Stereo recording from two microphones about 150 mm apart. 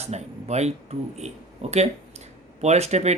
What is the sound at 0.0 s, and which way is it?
Speech, 45° right (ahead or behind).